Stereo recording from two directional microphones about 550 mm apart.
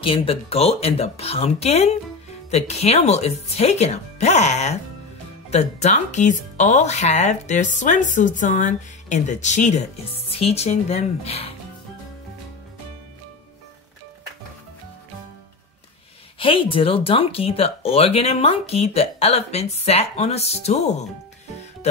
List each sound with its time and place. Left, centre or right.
0.0 s speech: centre
16.3 s speech: centre